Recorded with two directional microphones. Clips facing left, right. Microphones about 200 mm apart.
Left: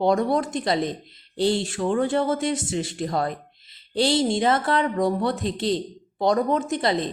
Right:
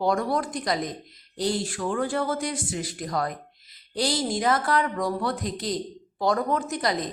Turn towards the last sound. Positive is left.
turn(degrees=25)  # may be behind; listen again after turning